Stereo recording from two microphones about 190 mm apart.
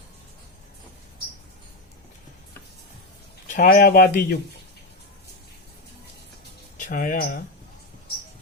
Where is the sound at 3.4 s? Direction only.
45° left (ahead or behind).